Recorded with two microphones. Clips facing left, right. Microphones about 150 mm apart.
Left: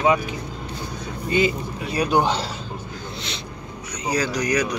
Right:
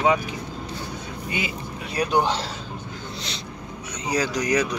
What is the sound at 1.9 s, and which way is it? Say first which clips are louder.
Speech: left 2 dB; 5° left (ahead or behind).